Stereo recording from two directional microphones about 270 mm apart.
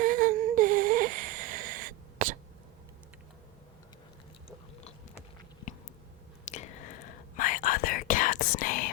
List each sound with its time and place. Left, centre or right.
0.0 s humming: right
4.4 s a sound: left
6.4 s whispering: left